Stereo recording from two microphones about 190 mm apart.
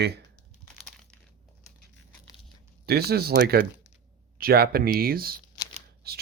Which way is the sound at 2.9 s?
55° right (ahead or behind).